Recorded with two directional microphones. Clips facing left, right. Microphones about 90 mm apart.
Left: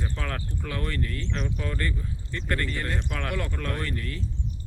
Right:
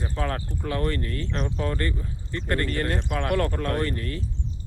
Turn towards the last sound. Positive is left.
turn(degrees=-40)  # may be behind; listen again after turning